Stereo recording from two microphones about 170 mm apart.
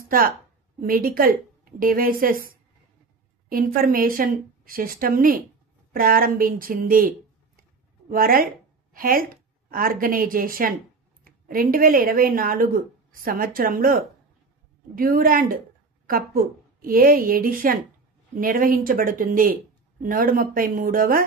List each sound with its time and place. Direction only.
0.1 s a woman's voice: 60° right (ahead or behind)
16.8 s speech: 55° right (ahead or behind)